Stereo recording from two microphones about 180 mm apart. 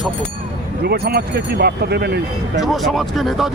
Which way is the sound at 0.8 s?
60° right (ahead or behind).